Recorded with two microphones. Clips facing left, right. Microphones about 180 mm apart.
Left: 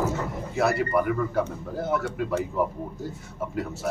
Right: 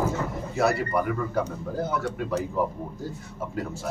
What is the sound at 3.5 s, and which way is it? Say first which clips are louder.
Speech: left 1 dB; 5° left (ahead or behind).